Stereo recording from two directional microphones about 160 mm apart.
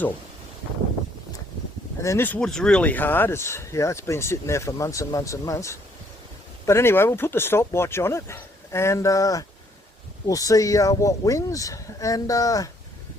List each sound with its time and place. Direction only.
2.0 s speech: 15° left (ahead or behind)